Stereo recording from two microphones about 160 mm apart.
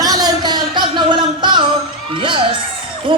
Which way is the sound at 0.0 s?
25° right (ahead or behind).